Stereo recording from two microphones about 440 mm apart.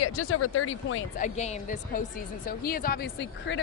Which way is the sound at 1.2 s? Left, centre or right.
Centre.